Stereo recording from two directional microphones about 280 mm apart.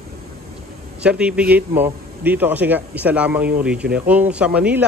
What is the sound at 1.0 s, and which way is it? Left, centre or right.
A woman's voice, centre.